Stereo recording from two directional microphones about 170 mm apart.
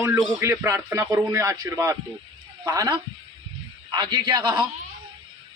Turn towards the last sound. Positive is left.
turn(degrees=-25)  # may be behind; listen again after turning